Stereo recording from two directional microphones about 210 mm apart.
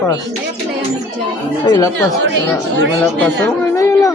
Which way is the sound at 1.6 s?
20° left (ahead or behind).